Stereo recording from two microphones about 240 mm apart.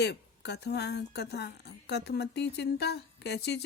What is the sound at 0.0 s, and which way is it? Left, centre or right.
A woman's voice, left.